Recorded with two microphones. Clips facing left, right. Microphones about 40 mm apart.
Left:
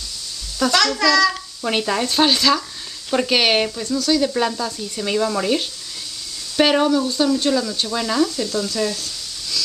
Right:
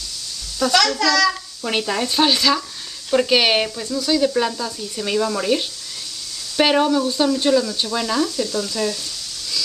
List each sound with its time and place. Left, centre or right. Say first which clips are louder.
0.6 s a child's voice: even; centre
0.9 s speech: left 2 dB; centre
1.2 s speech: left 1 dB; centre